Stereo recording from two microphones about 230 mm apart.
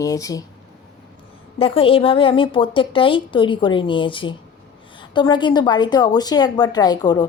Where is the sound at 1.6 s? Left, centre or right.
Left.